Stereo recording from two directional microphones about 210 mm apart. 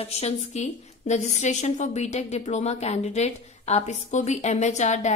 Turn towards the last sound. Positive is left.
turn(degrees=35)  # may be behind; listen again after turning